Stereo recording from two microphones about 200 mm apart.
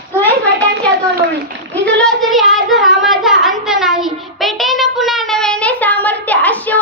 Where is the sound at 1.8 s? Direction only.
5° left (ahead or behind).